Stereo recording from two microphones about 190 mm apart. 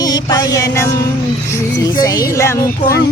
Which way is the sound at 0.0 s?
20° left (ahead or behind).